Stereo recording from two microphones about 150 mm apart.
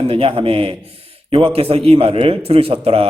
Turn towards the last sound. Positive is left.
turn(degrees=-40)  # may be behind; listen again after turning